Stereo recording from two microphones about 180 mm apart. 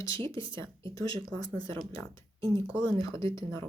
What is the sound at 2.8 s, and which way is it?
Speech, 25° right (ahead or behind).